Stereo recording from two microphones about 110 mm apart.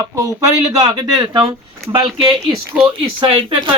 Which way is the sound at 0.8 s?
40° right (ahead or behind).